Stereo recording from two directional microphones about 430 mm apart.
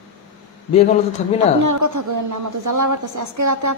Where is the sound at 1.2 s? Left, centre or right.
Centre.